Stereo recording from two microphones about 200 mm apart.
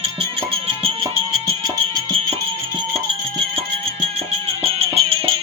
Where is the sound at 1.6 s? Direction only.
20° right (ahead or behind).